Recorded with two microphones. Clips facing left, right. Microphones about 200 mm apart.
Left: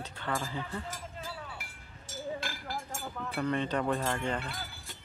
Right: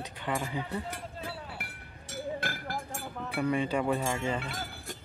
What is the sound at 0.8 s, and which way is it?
Cowbell, 60° right (ahead or behind).